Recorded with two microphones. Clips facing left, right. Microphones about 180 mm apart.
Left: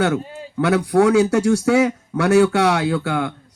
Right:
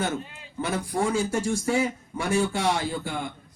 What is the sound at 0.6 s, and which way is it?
A man's voice, 70° left (ahead or behind).